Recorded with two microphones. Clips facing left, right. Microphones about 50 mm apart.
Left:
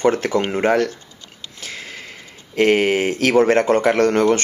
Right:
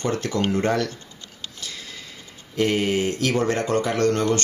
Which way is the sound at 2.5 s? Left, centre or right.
Left.